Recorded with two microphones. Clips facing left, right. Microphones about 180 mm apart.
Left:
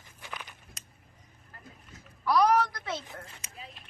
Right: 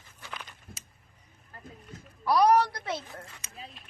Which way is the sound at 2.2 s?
30° right (ahead or behind).